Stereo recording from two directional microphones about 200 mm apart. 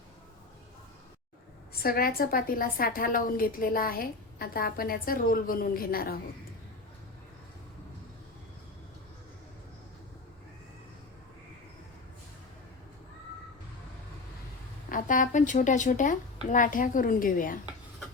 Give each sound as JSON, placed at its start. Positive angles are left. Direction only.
{"t": 1.8, "sound": "a woman's voice", "side_deg": 50}
{"t": 14.8, "sound": "a woman's voice", "side_deg": 40}